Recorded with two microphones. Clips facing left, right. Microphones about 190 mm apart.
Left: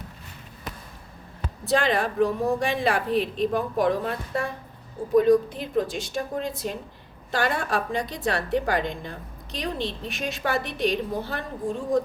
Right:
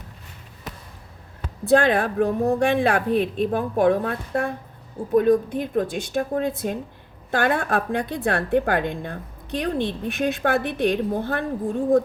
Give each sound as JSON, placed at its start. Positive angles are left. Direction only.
{"t": 1.7, "sound": "a woman's voice", "side_deg": -55}